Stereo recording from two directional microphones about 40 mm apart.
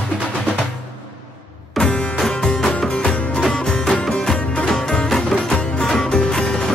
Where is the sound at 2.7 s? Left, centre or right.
Left.